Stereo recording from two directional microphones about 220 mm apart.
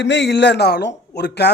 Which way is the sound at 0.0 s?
55° left (ahead or behind).